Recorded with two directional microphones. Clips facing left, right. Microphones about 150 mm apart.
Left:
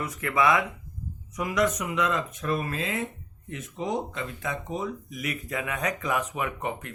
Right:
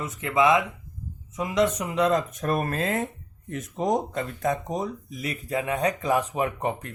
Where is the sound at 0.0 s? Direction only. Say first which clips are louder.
Right 2 dB; 20° right (ahead or behind).